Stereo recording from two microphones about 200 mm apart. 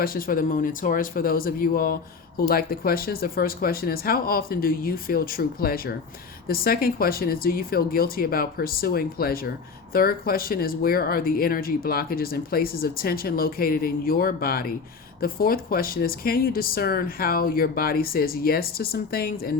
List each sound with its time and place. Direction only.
0.0 s speech: 45° left (ahead or behind)